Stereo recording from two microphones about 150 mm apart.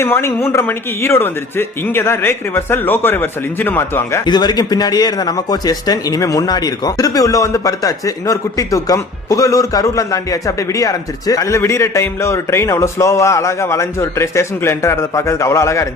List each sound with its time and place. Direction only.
0.0 s speech: 15° left (ahead or behind)
4.3 s a man's voice: 30° left (ahead or behind)